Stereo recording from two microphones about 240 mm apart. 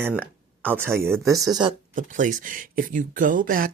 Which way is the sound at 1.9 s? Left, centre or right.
Right.